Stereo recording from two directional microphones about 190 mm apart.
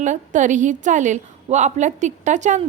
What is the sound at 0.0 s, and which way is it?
A woman's voice, 40° right (ahead or behind).